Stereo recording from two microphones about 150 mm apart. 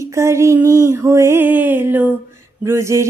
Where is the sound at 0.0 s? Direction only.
20° right (ahead or behind).